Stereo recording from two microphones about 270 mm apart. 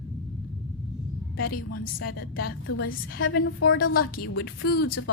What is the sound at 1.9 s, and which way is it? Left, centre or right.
A woman's voice, left.